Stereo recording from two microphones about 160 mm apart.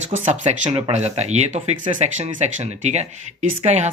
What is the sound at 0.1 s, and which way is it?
Speech, 45° right (ahead or behind).